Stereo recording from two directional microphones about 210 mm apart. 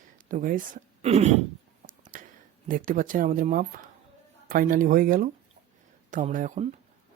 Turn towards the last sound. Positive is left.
turn(degrees=-35)  # may be behind; listen again after turning